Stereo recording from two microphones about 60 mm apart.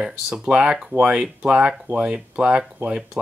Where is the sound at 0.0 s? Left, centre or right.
Centre.